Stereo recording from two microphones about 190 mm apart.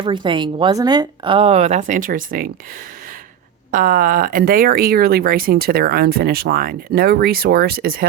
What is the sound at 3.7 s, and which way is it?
Speech, 45° right (ahead or behind).